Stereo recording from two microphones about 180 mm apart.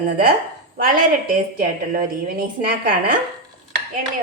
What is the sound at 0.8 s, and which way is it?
A woman's voice, 50° right (ahead or behind).